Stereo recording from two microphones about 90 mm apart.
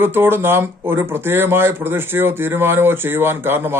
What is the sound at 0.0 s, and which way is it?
Speech, 25° right (ahead or behind).